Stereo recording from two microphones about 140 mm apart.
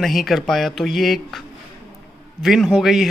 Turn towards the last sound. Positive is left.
turn(degrees=0)  # may be behind; listen again after turning